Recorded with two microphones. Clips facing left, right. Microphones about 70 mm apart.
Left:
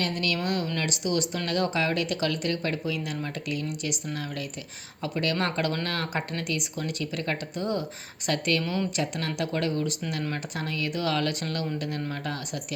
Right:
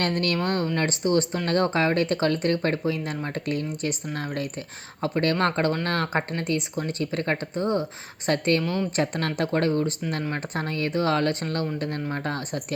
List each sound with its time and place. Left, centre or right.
0.0 s speech: right